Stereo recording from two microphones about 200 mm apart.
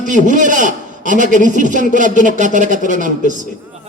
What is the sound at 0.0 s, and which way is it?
A man's voice, 40° right (ahead or behind).